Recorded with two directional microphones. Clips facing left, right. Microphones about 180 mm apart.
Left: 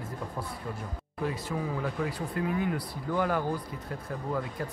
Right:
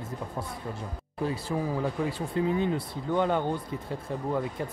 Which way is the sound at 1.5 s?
25° right (ahead or behind).